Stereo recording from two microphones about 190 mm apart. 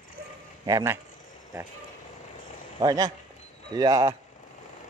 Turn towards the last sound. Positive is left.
turn(degrees=-20)  # may be behind; listen again after turning